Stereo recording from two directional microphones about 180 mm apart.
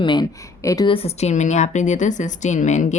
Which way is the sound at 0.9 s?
35° left (ahead or behind).